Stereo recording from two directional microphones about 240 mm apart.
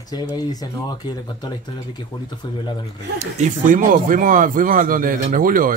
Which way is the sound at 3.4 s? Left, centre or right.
Right.